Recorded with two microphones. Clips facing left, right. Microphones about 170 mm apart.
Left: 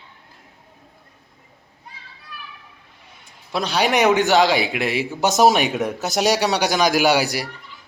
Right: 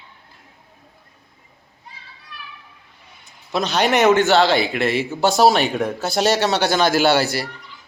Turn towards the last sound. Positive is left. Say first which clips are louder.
# right 1 dB
turn(degrees=15)  # may be behind; listen again after turning